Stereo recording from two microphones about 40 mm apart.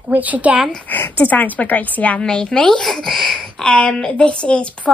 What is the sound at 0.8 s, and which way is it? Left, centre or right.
Speech, left.